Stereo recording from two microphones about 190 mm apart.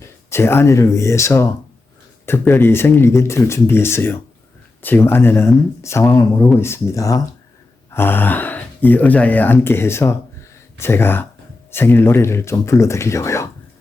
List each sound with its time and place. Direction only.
0.3 s speech: 15° left (ahead or behind)